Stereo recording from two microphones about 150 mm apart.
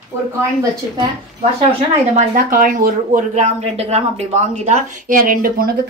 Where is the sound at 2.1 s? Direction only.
70° right (ahead or behind).